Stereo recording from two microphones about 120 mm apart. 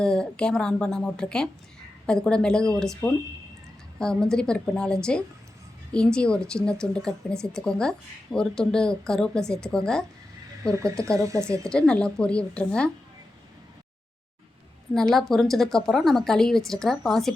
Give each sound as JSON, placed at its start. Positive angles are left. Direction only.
{"t": 0.0, "sound": "speech", "side_deg": 5}
{"t": 11.2, "sound": "speech", "side_deg": -25}
{"t": 11.7, "sound": "speech", "side_deg": 10}
{"t": 14.9, "sound": "speech", "side_deg": 5}